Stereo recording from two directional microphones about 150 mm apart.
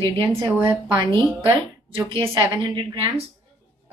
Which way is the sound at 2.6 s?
30° right (ahead or behind).